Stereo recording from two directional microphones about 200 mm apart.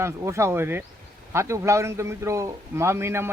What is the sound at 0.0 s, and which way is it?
A man's voice, 15° right (ahead or behind).